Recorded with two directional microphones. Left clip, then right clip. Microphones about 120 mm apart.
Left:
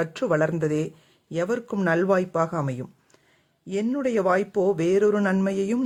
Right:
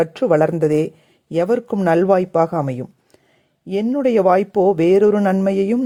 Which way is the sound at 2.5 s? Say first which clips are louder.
Right 7 dB; 30° right (ahead or behind).